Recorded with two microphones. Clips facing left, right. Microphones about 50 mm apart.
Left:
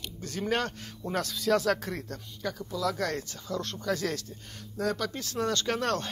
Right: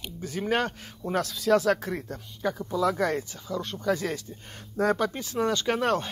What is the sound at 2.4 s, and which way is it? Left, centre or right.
Speech, right.